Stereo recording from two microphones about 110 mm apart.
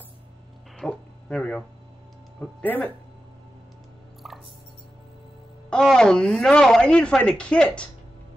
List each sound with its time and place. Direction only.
0.7 s speech: 5° left (ahead or behind)
2.6 s speech: 15° left (ahead or behind)
5.7 s speech: 5° left (ahead or behind)